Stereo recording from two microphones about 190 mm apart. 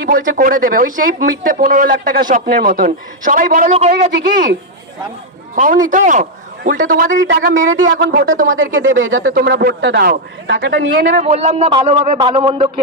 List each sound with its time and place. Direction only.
0.0 s speech: 45° right (ahead or behind)
5.6 s speech: 45° right (ahead or behind)
7.5 s speech: 90° right
8.0 s speech: 75° right (ahead or behind)
8.8 s speech: 90° right
9.2 s a man's voice: 50° right (ahead or behind)
11.1 s a man's voice: 35° right (ahead or behind)